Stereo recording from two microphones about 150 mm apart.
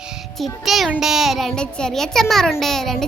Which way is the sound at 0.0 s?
Centre (ahead or behind).